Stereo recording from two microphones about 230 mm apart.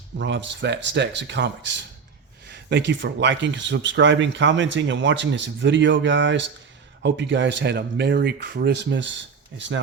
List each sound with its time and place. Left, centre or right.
0.2 s speech: right